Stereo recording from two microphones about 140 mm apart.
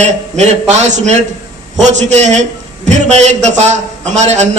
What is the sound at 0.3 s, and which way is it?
A man's voice, 55° right (ahead or behind).